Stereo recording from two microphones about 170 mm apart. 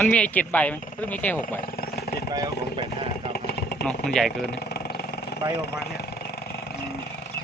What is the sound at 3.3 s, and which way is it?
Vehicle, 70° left (ahead or behind).